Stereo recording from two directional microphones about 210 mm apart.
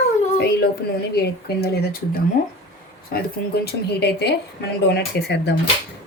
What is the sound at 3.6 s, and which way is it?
Speech, 50° left (ahead or behind).